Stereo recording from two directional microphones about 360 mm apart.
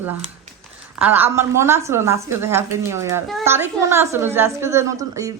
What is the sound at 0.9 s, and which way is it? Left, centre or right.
A woman's voice, centre.